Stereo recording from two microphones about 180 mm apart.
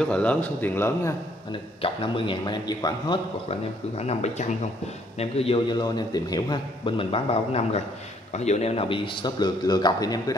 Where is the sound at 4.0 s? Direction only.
40° left (ahead or behind).